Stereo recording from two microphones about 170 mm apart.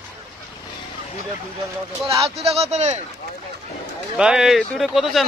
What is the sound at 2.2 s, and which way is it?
Speech, 35° right (ahead or behind).